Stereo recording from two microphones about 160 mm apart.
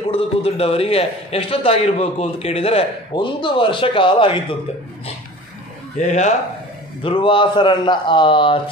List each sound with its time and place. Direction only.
0.1 s a man's voice: 40° left (ahead or behind)
5.9 s speech: 50° left (ahead or behind)
7.0 s a man's voice: 35° left (ahead or behind)